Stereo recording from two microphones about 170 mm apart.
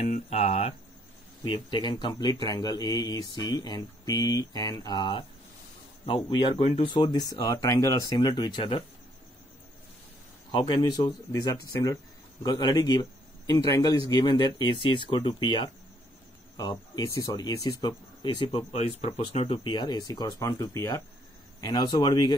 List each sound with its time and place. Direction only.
0.0 s speech: 40° left (ahead or behind)
1.4 s speech: 25° left (ahead or behind)
10.5 s speech: 25° left (ahead or behind)